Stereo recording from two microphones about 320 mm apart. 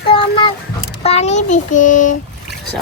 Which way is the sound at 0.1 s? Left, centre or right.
Centre.